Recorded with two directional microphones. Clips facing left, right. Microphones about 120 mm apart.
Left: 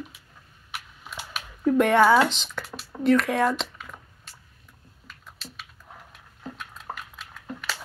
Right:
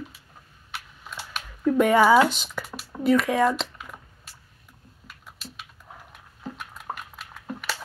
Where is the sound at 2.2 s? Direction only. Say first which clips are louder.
Right 2 dB; 10° right (ahead or behind).